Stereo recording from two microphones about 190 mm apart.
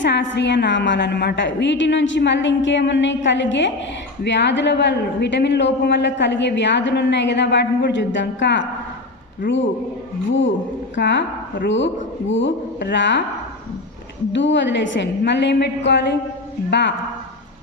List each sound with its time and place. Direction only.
0.0 s speech: 70° left (ahead or behind)
9.4 s a man's voice: 45° left (ahead or behind)
10.2 s speech: 75° left (ahead or behind)
14.3 s a man's voice: 75° left (ahead or behind)